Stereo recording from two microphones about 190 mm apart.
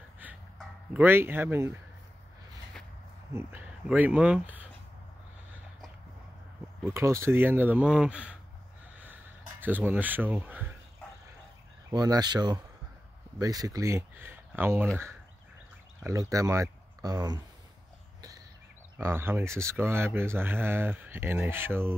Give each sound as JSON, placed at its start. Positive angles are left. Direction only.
{"t": 0.2, "sound": "a sound", "side_deg": -10}
{"t": 3.3, "sound": "speech", "side_deg": -10}
{"t": 6.9, "sound": "speech", "side_deg": -15}
{"t": 8.9, "sound": "a sound", "side_deg": -10}
{"t": 11.9, "sound": "speech", "side_deg": -20}
{"t": 16.0, "sound": "speech", "side_deg": -15}
{"t": 18.9, "sound": "speech", "side_deg": -10}